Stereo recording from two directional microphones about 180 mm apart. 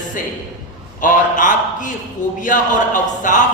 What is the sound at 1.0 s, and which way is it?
A man's voice, 45° left (ahead or behind).